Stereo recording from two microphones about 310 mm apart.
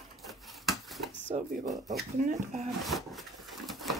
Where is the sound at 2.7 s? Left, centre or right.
Centre.